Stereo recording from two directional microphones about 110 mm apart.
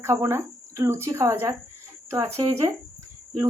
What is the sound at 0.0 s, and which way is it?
Speech, 25° right (ahead or behind).